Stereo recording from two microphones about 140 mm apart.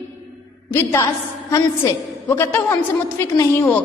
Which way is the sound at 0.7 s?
20° left (ahead or behind).